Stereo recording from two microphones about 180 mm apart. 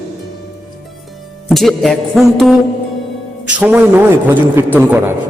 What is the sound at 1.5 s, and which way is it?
A man's voice, centre (ahead or behind).